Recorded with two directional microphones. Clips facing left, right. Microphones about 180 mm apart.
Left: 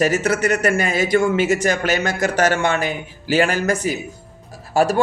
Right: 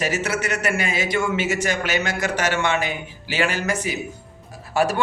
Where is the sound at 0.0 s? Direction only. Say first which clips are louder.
Left 6 dB; 50° left (ahead or behind).